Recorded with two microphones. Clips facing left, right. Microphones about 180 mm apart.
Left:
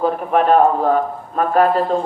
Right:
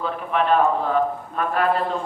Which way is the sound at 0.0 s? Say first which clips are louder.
Left 7 dB; 45° left (ahead or behind).